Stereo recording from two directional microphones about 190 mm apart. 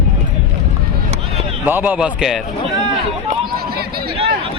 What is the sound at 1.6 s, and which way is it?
Speech, 10° right (ahead or behind).